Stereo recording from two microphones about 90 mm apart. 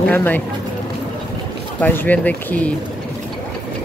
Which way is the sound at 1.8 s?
20° left (ahead or behind).